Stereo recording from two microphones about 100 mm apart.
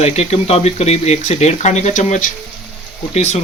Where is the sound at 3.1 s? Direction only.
90° left.